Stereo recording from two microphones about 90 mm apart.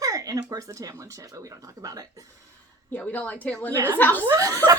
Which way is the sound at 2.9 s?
15° left (ahead or behind).